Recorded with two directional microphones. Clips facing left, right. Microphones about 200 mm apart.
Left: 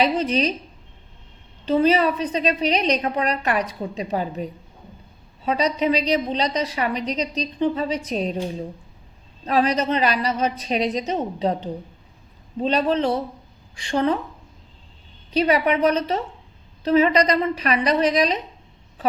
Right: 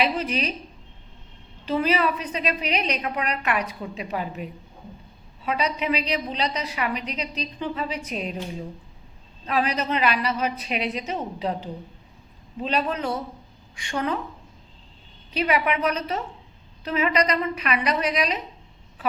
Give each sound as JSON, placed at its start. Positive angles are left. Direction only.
{"t": 0.0, "sound": "a woman's voice", "side_deg": 35}
{"t": 1.6, "sound": "a woman's voice", "side_deg": 30}
{"t": 5.5, "sound": "a woman's voice", "side_deg": 35}
{"t": 9.5, "sound": "a woman's voice", "side_deg": 35}
{"t": 15.3, "sound": "a woman's voice", "side_deg": 35}